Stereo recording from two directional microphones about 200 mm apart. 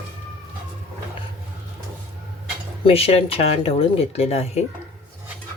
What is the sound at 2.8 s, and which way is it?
Speech, 30° left (ahead or behind).